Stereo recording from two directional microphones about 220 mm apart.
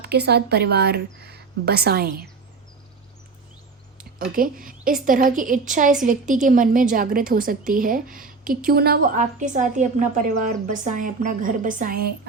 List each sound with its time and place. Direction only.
0.0 s speech: 50° right (ahead or behind)
4.4 s a woman's voice: 40° right (ahead or behind)